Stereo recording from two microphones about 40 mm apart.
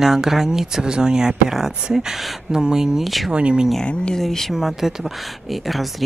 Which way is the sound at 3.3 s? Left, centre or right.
Right.